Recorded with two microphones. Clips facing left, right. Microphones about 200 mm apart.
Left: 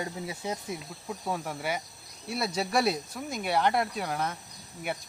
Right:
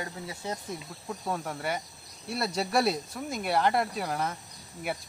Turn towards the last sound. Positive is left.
turn(degrees=0)  # may be behind; listen again after turning